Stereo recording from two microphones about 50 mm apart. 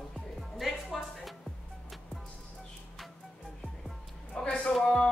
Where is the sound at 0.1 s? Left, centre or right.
Centre.